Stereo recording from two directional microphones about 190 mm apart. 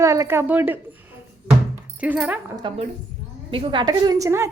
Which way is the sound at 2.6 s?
30° right (ahead or behind).